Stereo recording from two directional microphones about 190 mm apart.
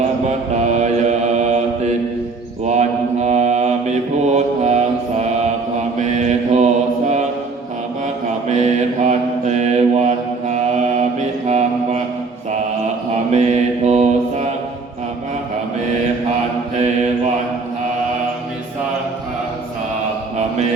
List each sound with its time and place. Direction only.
0.3 s mantra: 35° right (ahead or behind)
6.0 s mantra: 40° right (ahead or behind)
8.4 s mantra: 35° right (ahead or behind)
13.3 s mantra: 35° right (ahead or behind)